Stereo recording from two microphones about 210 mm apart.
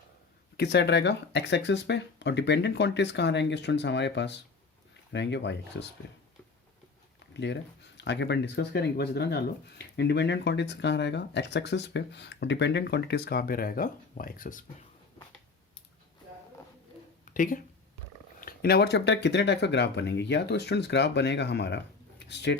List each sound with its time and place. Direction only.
0.5 s speech: 50° left (ahead or behind)
7.3 s speech: 55° left (ahead or behind); by 14.8 s 40° left (ahead or behind)
17.3 s speech: 40° left (ahead or behind)